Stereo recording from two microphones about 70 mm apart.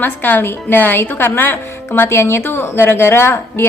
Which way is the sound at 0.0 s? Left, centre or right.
Left.